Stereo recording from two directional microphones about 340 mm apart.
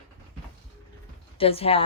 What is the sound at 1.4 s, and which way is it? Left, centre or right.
Speech, centre.